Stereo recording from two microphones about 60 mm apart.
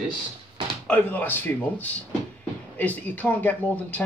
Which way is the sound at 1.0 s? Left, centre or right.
Left.